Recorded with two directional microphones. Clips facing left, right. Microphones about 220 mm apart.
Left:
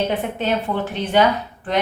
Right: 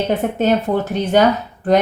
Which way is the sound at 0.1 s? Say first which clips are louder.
Right 6 dB; 45° right (ahead or behind).